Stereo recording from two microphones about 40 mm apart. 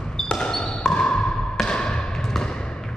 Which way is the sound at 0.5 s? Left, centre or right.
Centre.